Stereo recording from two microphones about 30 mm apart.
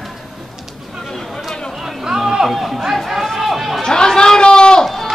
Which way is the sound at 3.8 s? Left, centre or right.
Left.